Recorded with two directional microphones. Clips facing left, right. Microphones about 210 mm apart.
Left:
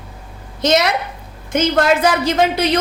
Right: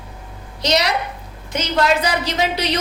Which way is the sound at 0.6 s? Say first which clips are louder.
Left 4 dB; 50° left (ahead or behind).